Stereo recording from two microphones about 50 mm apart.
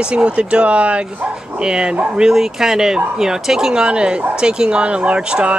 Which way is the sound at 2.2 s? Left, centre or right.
Centre.